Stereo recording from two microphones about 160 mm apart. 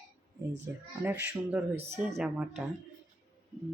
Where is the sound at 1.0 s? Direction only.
10° right (ahead or behind).